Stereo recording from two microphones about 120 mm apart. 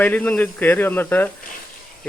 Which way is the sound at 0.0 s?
10° left (ahead or behind).